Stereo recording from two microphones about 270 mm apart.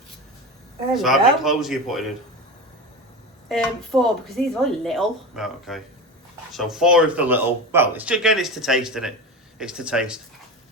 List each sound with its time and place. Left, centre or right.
0.9 s speech: centre
3.5 s speech: centre